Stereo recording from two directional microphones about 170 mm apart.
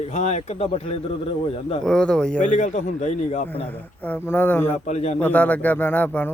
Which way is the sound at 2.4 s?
45° left (ahead or behind).